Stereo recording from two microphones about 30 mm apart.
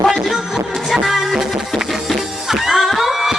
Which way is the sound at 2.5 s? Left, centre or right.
Centre.